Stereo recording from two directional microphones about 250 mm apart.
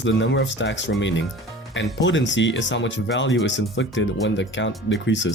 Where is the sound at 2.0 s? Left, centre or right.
Left.